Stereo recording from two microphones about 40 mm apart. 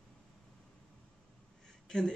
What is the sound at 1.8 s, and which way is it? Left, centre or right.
Speech, centre.